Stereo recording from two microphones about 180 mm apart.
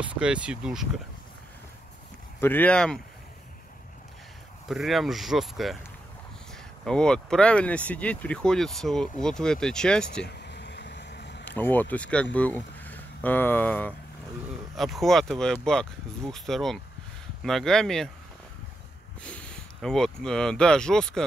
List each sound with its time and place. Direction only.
0.0 s speech: 5° right (ahead or behind)
2.4 s speech: 10° left (ahead or behind)
4.6 s speech: centre (ahead or behind)
6.9 s speech: 5° left (ahead or behind)
10.2 s a sound: 70° left (ahead or behind)
11.4 s speech: 10° left (ahead or behind)
19.2 s speech: 5° left (ahead or behind)